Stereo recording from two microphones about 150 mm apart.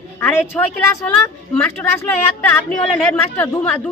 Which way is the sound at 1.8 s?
20° left (ahead or behind).